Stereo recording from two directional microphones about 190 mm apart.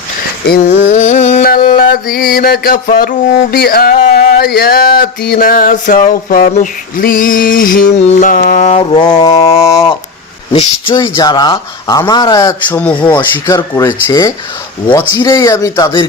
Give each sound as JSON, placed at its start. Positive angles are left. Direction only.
{"t": 0.4, "sound": "a sound", "side_deg": 50}
{"t": 1.5, "sound": "music", "side_deg": 50}
{"t": 7.9, "sound": "music", "side_deg": 35}
{"t": 9.0, "sound": "speech", "side_deg": 25}
{"t": 10.5, "sound": "speech", "side_deg": 25}